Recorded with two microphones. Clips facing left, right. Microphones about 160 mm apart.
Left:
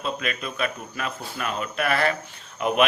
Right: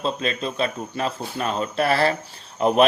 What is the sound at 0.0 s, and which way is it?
A man's voice, 30° right (ahead or behind).